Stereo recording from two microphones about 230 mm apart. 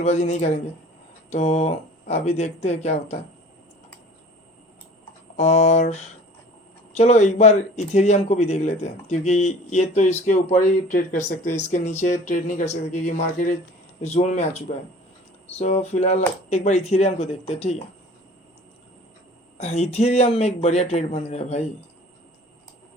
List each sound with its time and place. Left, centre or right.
0.0 s speech: left
5.4 s speech: left
19.5 s speech: left